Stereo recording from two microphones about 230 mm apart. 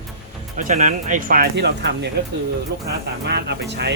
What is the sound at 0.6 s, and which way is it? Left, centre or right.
Speech, right.